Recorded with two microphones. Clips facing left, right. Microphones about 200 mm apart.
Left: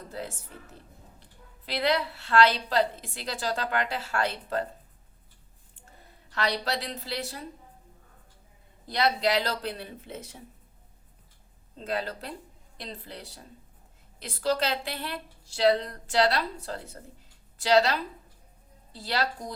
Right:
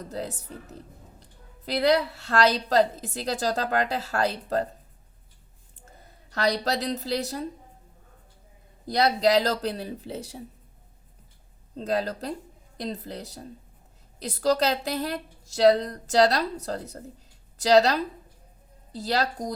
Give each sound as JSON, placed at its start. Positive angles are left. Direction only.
{"t": 0.1, "sound": "a woman's voice", "side_deg": -40}
{"t": 6.3, "sound": "a woman's voice", "side_deg": -40}
{"t": 8.9, "sound": "a woman's voice", "side_deg": -40}
{"t": 11.8, "sound": "a woman's voice", "side_deg": -40}